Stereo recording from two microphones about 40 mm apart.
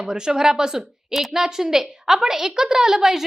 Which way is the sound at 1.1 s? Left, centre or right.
Centre.